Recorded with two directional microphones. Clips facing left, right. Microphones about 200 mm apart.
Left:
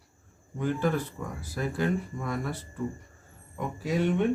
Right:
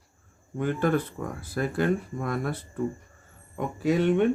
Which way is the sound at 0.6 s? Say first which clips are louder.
Right 3 dB; 60° right (ahead or behind).